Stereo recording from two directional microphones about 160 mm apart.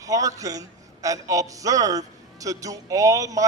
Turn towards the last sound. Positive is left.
turn(degrees=-20)  # may be behind; listen again after turning